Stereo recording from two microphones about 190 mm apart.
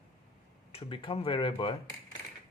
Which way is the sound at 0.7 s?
30° left (ahead or behind).